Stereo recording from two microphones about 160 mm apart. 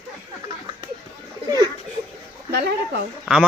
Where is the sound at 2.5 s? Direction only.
90° right.